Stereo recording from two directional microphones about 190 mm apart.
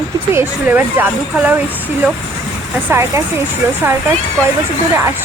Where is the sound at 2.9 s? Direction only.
15° right (ahead or behind).